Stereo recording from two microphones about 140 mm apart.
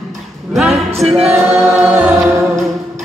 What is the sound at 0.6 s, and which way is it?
Music, centre (ahead or behind).